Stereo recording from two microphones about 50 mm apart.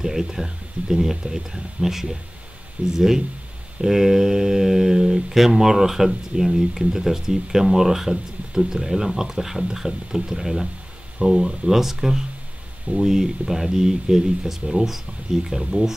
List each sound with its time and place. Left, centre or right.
0.0 s speech: centre
2.8 s speech: right
3.8 s speech: centre